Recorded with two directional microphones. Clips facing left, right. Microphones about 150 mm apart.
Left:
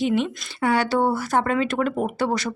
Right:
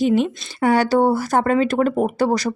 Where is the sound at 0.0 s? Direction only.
40° right (ahead or behind).